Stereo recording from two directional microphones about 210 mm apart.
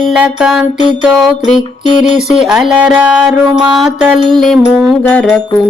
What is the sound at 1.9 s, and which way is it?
Music, 35° left (ahead or behind).